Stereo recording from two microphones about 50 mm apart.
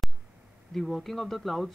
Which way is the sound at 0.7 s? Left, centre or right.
Centre.